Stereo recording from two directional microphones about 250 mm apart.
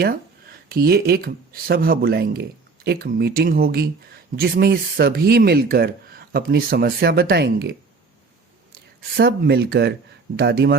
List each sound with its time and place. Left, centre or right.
0.7 s speech: right